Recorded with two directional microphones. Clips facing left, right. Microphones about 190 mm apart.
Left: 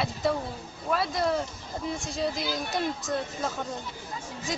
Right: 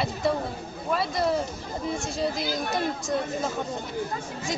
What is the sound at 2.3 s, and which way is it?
Speech, 50° right (ahead or behind).